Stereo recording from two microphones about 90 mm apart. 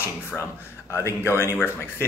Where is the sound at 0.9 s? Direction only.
30° left (ahead or behind).